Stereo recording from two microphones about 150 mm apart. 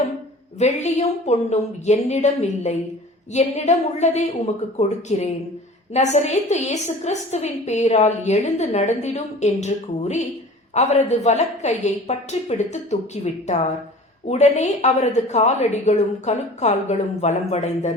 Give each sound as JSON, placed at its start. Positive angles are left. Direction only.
{"t": 0.6, "sound": "a woman's voice", "side_deg": 50}